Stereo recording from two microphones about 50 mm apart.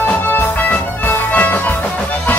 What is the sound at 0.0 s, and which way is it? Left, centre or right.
Music, left.